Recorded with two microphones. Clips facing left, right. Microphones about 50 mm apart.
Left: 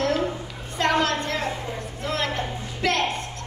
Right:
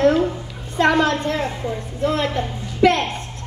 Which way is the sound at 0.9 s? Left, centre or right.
Right.